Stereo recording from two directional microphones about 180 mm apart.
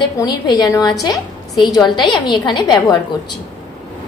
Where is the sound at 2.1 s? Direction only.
25° left (ahead or behind).